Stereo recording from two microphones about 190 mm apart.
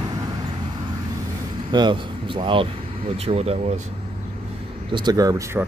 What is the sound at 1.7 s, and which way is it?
Speech, 25° right (ahead or behind).